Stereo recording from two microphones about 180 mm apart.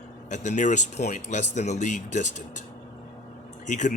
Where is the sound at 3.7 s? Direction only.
45° left (ahead or behind).